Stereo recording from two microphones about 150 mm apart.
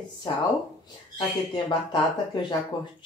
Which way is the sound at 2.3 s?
30° left (ahead or behind).